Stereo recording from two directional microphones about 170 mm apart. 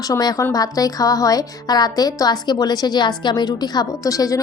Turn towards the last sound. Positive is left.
turn(degrees=20)  # may be behind; listen again after turning